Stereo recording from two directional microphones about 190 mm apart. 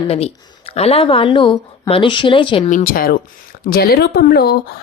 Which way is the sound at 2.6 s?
45° left (ahead or behind).